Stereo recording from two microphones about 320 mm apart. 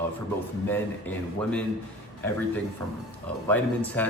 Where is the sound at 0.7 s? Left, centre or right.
Centre.